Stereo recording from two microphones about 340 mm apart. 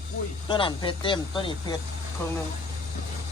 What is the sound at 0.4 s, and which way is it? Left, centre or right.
Speech, centre.